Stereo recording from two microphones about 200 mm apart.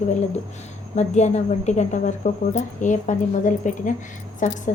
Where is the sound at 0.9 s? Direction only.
35° left (ahead or behind).